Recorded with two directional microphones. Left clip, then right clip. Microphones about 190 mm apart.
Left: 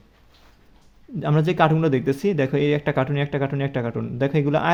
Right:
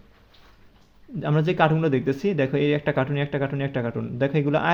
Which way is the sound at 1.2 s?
15° left (ahead or behind).